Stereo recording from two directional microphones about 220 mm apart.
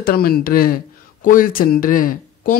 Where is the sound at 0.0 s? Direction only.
45° left (ahead or behind).